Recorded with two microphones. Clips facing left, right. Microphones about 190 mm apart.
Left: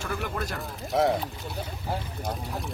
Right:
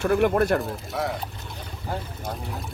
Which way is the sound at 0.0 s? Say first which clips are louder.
Right 12 dB; 60° right (ahead or behind).